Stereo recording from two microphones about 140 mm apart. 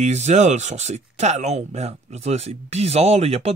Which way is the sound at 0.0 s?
55° right (ahead or behind).